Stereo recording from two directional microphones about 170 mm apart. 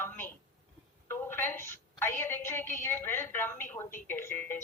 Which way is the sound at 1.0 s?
15° left (ahead or behind).